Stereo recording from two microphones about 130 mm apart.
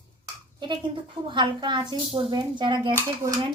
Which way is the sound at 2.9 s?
25° right (ahead or behind).